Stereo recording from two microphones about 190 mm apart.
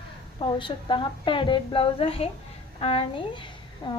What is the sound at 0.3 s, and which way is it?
A woman's voice, 25° left (ahead or behind).